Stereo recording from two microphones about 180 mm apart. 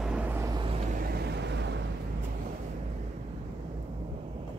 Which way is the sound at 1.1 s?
65° right (ahead or behind).